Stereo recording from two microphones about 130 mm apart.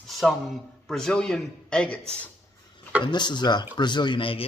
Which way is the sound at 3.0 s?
35° left (ahead or behind).